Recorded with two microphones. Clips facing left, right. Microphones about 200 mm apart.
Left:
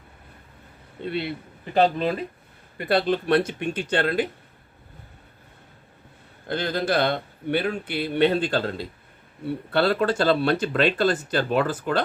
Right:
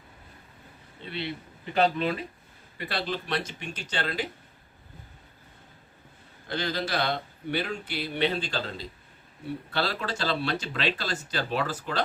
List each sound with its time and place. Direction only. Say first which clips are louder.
1.0 s speech: left 7 dB; 55° left (ahead or behind)
1.7 s speech: left 4 dB; 40° left (ahead or behind)
2.7 s speech: left 10 dB; 50° left (ahead or behind)
6.5 s speech: left 6 dB; 55° left (ahead or behind)